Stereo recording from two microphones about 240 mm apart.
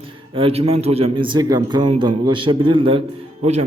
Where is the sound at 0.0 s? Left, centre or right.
Right.